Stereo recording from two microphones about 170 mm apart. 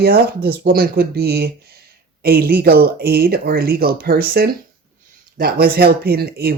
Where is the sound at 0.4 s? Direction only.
65° right (ahead or behind).